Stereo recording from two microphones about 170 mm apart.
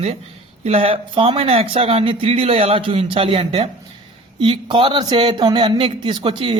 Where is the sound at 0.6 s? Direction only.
35° right (ahead or behind).